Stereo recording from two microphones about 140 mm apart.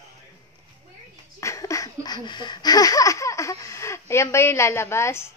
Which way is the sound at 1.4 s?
20° left (ahead or behind).